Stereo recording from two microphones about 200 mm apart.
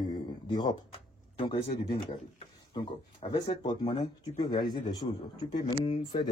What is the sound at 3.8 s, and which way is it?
Speech, 20° left (ahead or behind).